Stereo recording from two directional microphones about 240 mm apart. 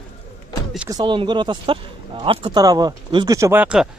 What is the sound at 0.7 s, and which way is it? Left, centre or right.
Speech, centre.